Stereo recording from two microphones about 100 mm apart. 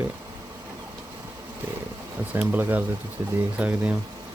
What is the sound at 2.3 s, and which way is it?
Speech, 20° right (ahead or behind).